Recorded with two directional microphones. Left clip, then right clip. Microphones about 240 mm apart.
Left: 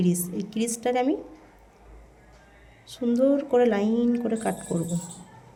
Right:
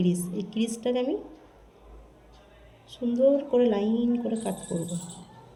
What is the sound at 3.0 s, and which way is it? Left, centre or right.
A woman's voice, left.